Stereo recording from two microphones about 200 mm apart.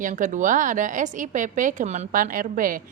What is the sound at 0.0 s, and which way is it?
A woman's voice, 40° right (ahead or behind).